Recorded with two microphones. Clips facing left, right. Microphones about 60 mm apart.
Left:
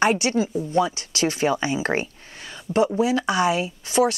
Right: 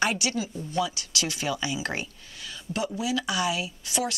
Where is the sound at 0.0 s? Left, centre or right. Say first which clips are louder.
Left 7 dB; left.